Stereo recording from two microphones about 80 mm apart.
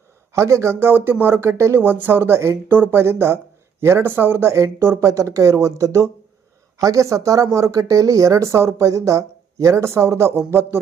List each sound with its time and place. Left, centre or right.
0.3 s speech: right